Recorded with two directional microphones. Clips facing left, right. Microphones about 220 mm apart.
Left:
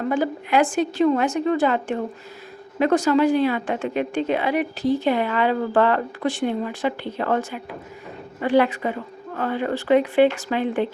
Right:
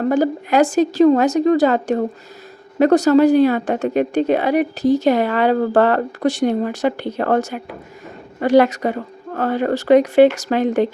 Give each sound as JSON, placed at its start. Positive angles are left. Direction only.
{"t": 0.0, "sound": "a woman's voice", "side_deg": -40}